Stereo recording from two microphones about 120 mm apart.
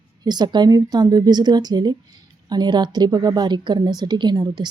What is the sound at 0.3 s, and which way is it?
A woman's voice, 35° right (ahead or behind).